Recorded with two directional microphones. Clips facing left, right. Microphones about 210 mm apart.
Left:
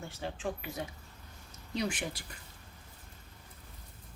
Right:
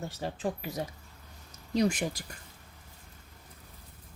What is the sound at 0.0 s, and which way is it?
Speech, 40° right (ahead or behind).